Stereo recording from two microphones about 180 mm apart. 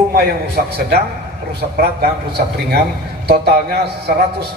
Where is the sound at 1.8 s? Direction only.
60° right (ahead or behind).